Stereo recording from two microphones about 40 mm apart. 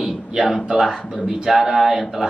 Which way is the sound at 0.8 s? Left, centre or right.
Centre.